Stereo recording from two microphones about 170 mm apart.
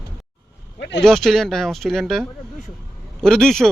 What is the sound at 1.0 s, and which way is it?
Speech, centre (ahead or behind).